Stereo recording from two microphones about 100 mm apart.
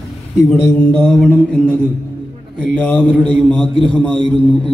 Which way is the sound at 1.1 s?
10° left (ahead or behind).